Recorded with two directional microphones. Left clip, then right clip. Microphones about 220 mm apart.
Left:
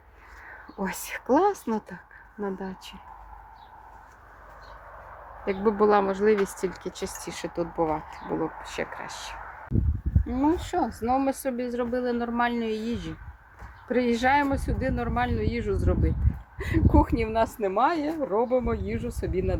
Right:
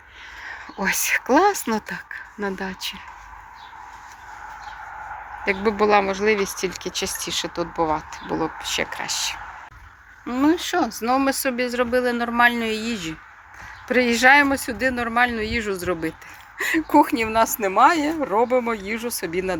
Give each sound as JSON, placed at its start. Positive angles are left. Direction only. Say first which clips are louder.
{"t": 0.4, "sound": "speech", "louder": "right 9 dB", "side_deg": 10}
{"t": 5.5, "sound": "speech", "louder": "right 3 dB", "side_deg": 15}
{"t": 8.6, "sound": "speech", "louder": "right 8 dB", "side_deg": 0}